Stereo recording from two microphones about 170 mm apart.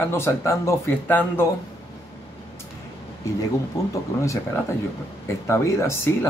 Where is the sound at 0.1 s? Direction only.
15° left (ahead or behind).